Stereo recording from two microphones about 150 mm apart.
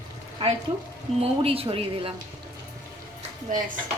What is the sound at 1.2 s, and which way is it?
Speech, 40° right (ahead or behind).